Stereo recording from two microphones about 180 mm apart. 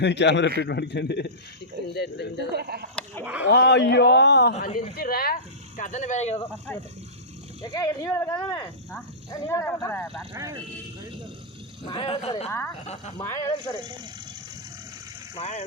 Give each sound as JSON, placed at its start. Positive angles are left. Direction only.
{"t": 0.0, "sound": "a man's voice", "side_deg": 75}
{"t": 2.5, "sound": "speech", "side_deg": -60}
{"t": 3.5, "sound": "a man's voice", "side_deg": 75}
{"t": 4.6, "sound": "speech", "side_deg": 55}
{"t": 7.6, "sound": "speech", "side_deg": 20}
{"t": 10.3, "sound": "speech", "side_deg": -20}
{"t": 11.9, "sound": "speech", "side_deg": 30}
{"t": 12.5, "sound": "speech", "side_deg": 15}
{"t": 15.4, "sound": "speech", "side_deg": 40}